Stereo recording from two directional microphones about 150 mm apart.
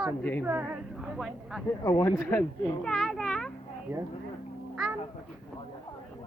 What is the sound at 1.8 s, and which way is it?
Speech, 20° left (ahead or behind).